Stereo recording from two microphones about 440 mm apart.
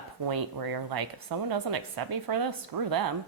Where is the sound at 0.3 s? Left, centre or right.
Right.